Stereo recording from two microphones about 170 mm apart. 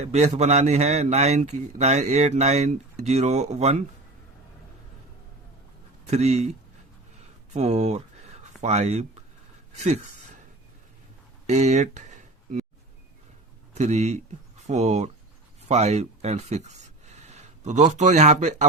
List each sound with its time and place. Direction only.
0.0 s a man's voice: 40° right (ahead or behind)
6.1 s a man's voice: 40° right (ahead or behind)
7.5 s a sound: 40° right (ahead or behind)
8.6 s a man's voice: 40° right (ahead or behind)
11.4 s a sound: 40° right (ahead or behind)
13.7 s a man's voice: 40° right (ahead or behind)